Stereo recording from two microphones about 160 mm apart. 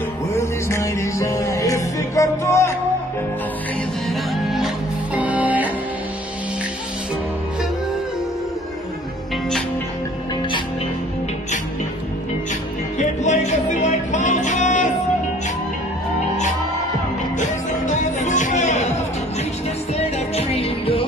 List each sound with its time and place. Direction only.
0.3 s music: 15° left (ahead or behind)
4.1 s music: centre (ahead or behind)
12.9 s music: 45° left (ahead or behind)
17.4 s music: 50° left (ahead or behind)
20.0 s music: 40° left (ahead or behind)